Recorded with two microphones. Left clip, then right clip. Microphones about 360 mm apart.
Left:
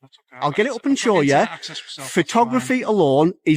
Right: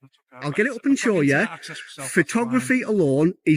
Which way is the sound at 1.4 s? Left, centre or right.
Centre.